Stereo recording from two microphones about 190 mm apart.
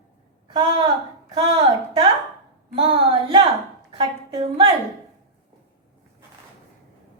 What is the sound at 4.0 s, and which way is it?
Speech, 25° right (ahead or behind).